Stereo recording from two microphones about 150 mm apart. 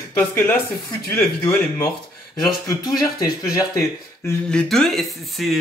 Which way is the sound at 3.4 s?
20° left (ahead or behind).